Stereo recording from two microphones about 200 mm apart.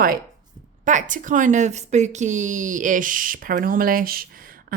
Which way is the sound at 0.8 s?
40° right (ahead or behind).